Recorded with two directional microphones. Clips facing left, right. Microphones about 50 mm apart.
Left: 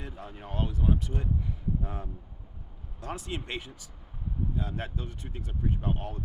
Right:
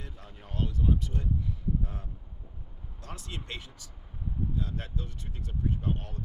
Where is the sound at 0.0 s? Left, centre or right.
Left.